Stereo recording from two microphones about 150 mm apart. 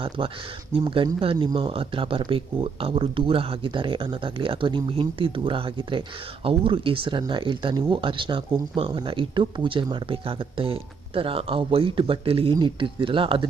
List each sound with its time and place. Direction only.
0.2 s speech: 35° right (ahead or behind)